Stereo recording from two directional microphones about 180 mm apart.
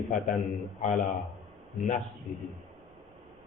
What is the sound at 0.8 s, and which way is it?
Speech, 45° left (ahead or behind).